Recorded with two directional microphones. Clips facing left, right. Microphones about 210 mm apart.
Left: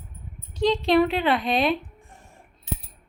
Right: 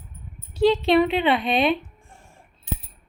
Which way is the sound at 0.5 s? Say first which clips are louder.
Right 2 dB; 5° right (ahead or behind).